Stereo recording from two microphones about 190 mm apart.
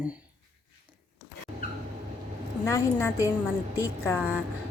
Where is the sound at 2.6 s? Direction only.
15° left (ahead or behind).